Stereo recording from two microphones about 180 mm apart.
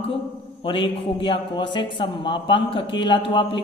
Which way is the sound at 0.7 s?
30° left (ahead or behind).